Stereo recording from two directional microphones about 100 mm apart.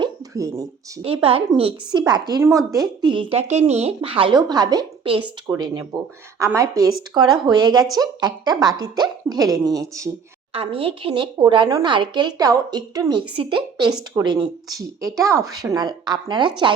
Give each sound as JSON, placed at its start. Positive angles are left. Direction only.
{"t": 0.3, "sound": "speech", "side_deg": -35}
{"t": 1.0, "sound": "speech", "side_deg": -65}
{"t": 1.9, "sound": "speech", "side_deg": -45}
{"t": 2.4, "sound": "speech", "side_deg": -30}
{"t": 3.0, "sound": "speech", "side_deg": -55}
{"t": 4.4, "sound": "speech", "side_deg": -45}
{"t": 10.5, "sound": "speech", "side_deg": -65}
{"t": 13.4, "sound": "speech", "side_deg": -60}
{"t": 14.2, "sound": "speech", "side_deg": -40}
{"t": 15.8, "sound": "speech", "side_deg": -45}